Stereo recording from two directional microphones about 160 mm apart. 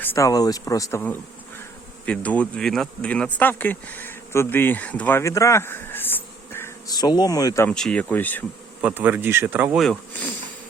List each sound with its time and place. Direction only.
0.0 s speech: 15° left (ahead or behind)
7.7 s speech: 5° left (ahead or behind)
8.8 s speech: 10° right (ahead or behind)
9.8 s snake: 5° left (ahead or behind)